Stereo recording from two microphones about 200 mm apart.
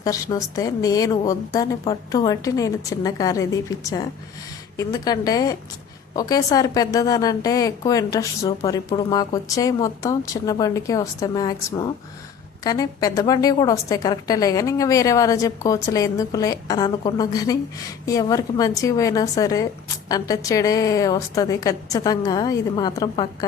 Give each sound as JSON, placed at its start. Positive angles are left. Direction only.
{"t": 0.0, "sound": "a woman's voice", "side_deg": 20}